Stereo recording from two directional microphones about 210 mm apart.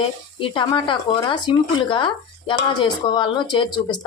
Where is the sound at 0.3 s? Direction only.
25° left (ahead or behind).